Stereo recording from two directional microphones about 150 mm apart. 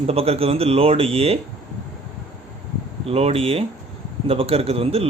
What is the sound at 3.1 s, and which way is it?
A man's voice, 40° right (ahead or behind).